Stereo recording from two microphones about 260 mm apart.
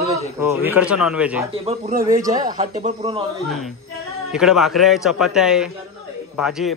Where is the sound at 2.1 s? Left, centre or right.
Centre.